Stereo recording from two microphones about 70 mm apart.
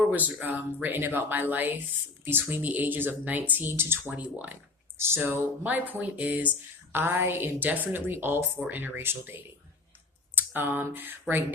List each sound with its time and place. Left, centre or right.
0.0 s speech: right
4.1 s speech: right
4.9 s a woman's voice: right
5.6 s a woman's voice: right
10.3 s a sound: right